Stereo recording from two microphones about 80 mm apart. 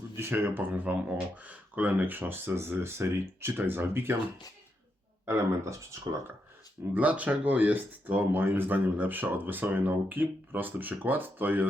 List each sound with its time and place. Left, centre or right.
0.2 s speech: right
5.2 s speech: right
6.9 s speech: centre